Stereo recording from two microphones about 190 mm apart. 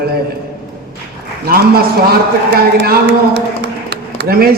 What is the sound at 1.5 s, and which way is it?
A man's voice, 55° right (ahead or behind).